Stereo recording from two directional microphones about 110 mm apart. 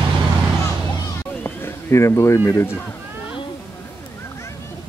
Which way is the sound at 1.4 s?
25° left (ahead or behind).